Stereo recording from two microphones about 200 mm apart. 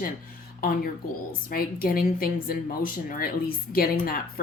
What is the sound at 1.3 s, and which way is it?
Speech, 45° left (ahead or behind).